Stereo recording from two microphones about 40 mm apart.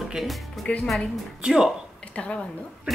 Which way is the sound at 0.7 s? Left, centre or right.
Left.